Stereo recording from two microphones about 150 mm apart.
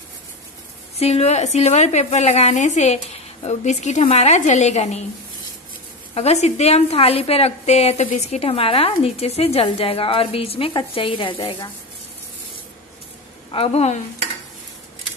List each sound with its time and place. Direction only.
0.9 s a woman's voice: 45° left (ahead or behind)
6.1 s a woman's voice: 45° left (ahead or behind)
13.5 s a woman's voice: 40° left (ahead or behind)